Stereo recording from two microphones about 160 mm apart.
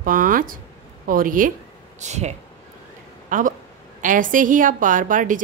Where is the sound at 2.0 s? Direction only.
45° right (ahead or behind).